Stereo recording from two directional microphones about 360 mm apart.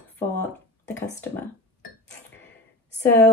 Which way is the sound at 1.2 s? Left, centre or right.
Centre.